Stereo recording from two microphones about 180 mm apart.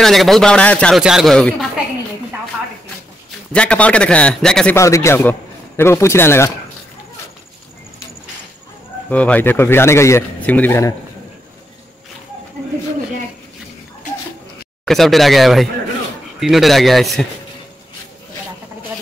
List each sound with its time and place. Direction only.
0.0 s speech: centre (ahead or behind)
3.5 s a man's voice: 5° left (ahead or behind)
4.7 s a man's voice: 15° left (ahead or behind)
9.1 s a man's voice: 10° left (ahead or behind)
14.9 s speech: centre (ahead or behind)